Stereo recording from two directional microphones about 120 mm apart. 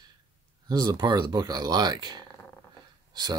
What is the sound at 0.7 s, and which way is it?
Speech, 35° right (ahead or behind).